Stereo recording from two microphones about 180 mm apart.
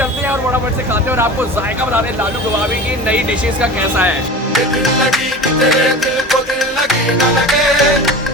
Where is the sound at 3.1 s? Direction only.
5° right (ahead or behind).